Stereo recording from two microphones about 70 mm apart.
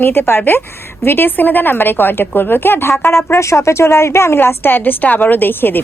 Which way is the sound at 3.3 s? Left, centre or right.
Left.